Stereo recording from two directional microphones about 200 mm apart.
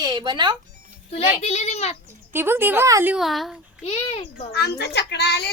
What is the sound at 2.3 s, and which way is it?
A woman's voice, 10° right (ahead or behind).